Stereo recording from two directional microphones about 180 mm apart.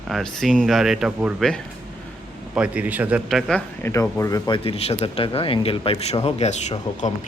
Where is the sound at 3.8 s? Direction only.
15° left (ahead or behind).